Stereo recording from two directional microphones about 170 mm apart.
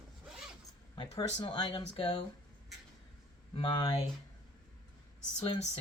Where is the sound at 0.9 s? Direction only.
30° left (ahead or behind).